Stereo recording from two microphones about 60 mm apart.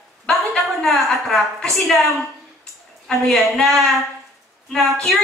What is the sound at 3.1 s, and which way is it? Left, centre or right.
Speech, centre.